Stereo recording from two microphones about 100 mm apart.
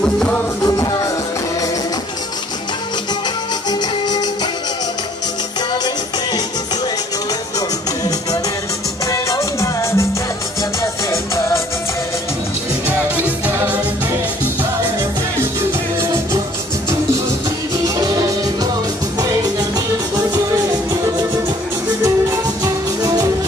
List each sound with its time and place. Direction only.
0.0 s music: 10° left (ahead or behind)
0.6 s music: 35° left (ahead or behind)
9.0 s music: 35° left (ahead or behind)
13.1 s music: 15° right (ahead or behind)
17.8 s music: 40° right (ahead or behind)
22.6 s music: 35° right (ahead or behind)